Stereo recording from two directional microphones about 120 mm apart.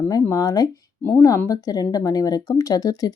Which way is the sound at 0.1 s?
30° left (ahead or behind).